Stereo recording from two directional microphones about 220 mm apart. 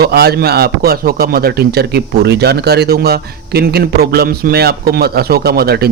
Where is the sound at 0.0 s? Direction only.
45° right (ahead or behind).